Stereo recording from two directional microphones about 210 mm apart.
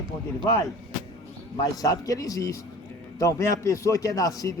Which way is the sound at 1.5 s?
15° left (ahead or behind).